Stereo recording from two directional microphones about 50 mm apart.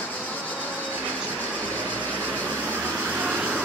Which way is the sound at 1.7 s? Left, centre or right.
Left.